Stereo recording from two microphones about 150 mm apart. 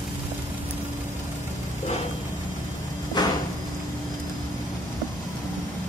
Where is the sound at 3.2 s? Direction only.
30° left (ahead or behind).